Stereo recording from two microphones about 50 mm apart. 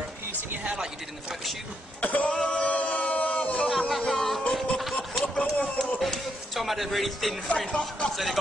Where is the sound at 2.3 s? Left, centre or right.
Centre.